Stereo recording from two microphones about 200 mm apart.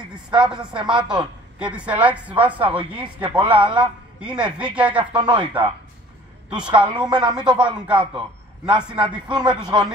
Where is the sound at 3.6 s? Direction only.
25° right (ahead or behind).